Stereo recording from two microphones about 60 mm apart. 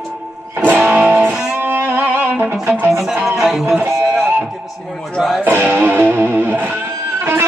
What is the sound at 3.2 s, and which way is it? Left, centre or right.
Speech, centre.